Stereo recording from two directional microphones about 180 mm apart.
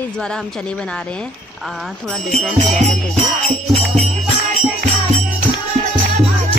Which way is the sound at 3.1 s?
35° right (ahead or behind).